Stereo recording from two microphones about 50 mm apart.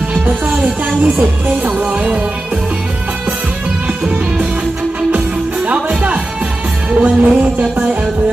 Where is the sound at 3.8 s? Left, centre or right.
Right.